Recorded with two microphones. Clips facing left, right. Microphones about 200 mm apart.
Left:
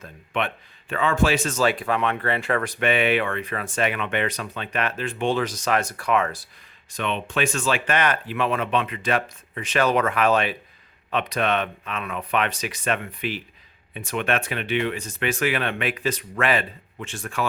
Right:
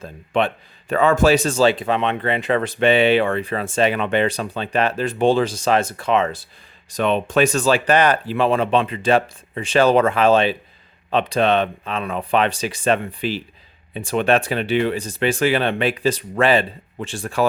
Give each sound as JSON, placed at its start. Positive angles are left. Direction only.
{"t": 0.0, "sound": "speech", "side_deg": -30}
{"t": 6.9, "sound": "speech", "side_deg": -40}